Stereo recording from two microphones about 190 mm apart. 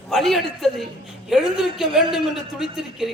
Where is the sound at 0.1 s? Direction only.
Centre (ahead or behind).